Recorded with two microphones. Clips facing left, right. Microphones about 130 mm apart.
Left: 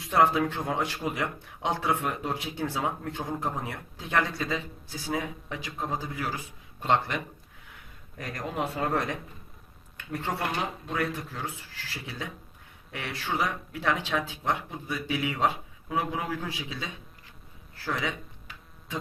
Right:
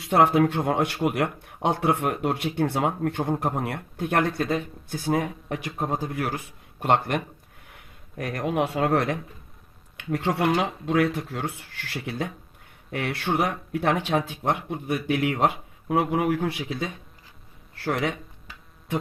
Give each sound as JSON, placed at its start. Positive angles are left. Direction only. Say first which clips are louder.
{"t": 0.0, "sound": "speech", "louder": "right 4 dB", "side_deg": -65}
{"t": 8.2, "sound": "speech", "louder": "right 7 dB", "side_deg": -60}
{"t": 18.9, "sound": "a sound", "louder": "right 7 dB", "side_deg": -60}